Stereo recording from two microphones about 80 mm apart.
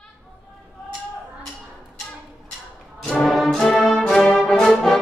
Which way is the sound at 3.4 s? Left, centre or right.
Centre.